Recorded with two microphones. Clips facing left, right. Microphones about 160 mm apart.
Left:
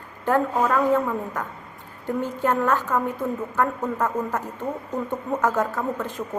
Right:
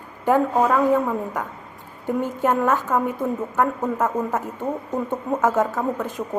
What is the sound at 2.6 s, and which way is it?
A woman's voice, 15° right (ahead or behind).